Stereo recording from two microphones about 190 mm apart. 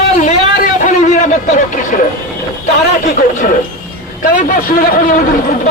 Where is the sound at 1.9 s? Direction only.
45° left (ahead or behind).